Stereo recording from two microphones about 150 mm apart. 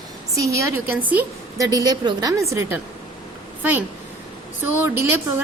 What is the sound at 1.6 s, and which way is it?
Speech, 25° right (ahead or behind).